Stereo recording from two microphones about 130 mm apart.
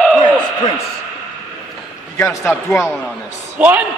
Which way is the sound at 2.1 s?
20° left (ahead or behind).